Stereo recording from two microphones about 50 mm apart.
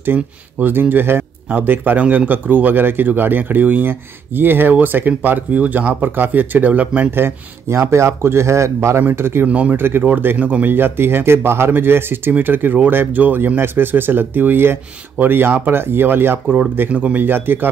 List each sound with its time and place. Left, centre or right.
0.0 s a man's voice: right
7.1 s speech: right
9.1 s speech: right
9.5 s speech: right
9.8 s a man's voice: right
16.9 s speech: right
17.2 s speech: right